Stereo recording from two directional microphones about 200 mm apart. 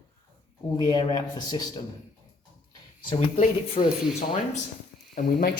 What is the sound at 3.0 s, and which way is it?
Speech, 25° left (ahead or behind).